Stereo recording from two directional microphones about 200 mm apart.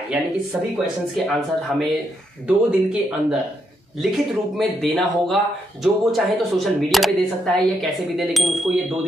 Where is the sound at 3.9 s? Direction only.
Centre (ahead or behind).